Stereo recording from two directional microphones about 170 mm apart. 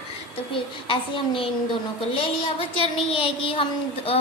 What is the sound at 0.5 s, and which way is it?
Child singing, 30° left (ahead or behind).